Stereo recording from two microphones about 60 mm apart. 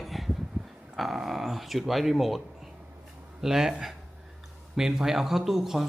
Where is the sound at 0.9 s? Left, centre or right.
Centre.